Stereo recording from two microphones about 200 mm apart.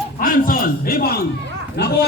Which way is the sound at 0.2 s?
45° left (ahead or behind).